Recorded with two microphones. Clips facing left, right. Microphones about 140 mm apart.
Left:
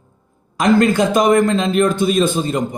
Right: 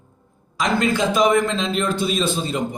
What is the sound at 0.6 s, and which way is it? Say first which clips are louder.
A man's voice: left 7 dB; 50° left (ahead or behind).